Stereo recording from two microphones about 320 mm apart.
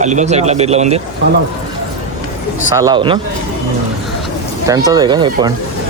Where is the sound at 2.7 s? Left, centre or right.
Centre.